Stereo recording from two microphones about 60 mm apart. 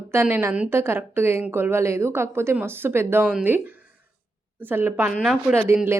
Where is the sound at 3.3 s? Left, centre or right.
Right.